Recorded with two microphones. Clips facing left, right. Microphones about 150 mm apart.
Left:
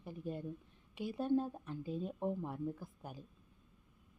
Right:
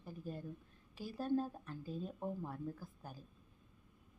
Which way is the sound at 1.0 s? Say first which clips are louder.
Left 3 dB; 20° left (ahead or behind).